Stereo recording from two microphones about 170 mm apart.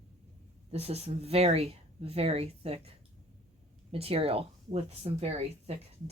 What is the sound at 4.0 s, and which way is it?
Speech, 35° right (ahead or behind).